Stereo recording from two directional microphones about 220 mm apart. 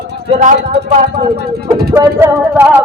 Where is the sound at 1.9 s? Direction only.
10° right (ahead or behind).